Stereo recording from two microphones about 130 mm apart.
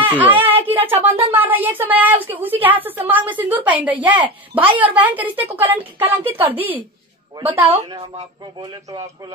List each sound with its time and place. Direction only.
0.0 s a woman's voice: 15° right (ahead or behind)